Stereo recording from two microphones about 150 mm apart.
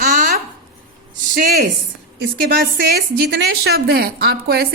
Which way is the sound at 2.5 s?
80° right.